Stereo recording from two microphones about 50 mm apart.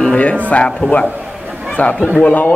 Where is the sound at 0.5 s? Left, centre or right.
Left.